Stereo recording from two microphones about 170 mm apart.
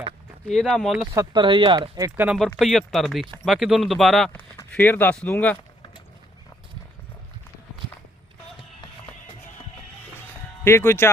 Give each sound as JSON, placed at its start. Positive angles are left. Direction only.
{"t": 0.5, "sound": "speech", "side_deg": 5}
{"t": 1.1, "sound": "speech", "side_deg": -20}
{"t": 2.2, "sound": "speech", "side_deg": -5}
{"t": 10.2, "sound": "music", "side_deg": 15}